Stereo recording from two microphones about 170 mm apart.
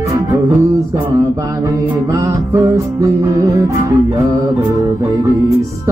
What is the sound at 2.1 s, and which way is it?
Music, 20° right (ahead or behind).